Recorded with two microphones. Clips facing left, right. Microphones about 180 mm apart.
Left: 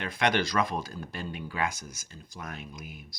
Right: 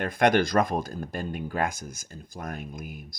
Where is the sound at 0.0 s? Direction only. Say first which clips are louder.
Right 6 dB; 50° right (ahead or behind).